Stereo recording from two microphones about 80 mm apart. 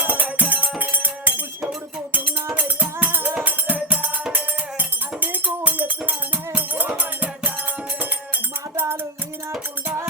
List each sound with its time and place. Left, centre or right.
0.0 s music: centre
8.7 s music: right